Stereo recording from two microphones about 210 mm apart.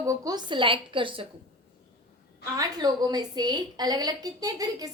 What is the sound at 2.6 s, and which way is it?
A woman's voice, 20° right (ahead or behind).